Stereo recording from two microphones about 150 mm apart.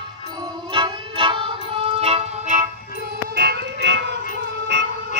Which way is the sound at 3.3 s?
90° right.